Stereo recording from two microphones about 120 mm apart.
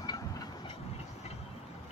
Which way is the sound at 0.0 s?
35° left (ahead or behind).